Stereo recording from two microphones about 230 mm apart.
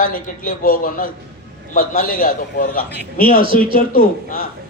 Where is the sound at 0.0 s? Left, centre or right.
Left.